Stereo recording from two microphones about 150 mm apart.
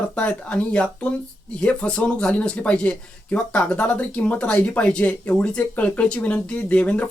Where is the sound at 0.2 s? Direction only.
10° left (ahead or behind).